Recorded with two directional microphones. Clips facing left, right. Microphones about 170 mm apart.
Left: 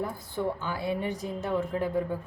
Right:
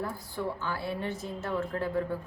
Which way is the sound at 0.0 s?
20° left (ahead or behind).